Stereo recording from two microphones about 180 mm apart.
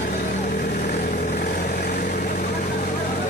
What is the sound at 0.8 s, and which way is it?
Vehicle, 55° left (ahead or behind).